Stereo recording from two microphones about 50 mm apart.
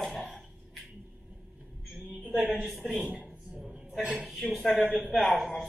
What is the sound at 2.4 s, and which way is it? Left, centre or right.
Speech, centre.